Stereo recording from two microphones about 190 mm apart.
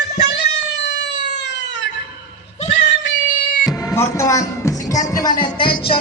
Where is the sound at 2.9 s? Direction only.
65° left (ahead or behind).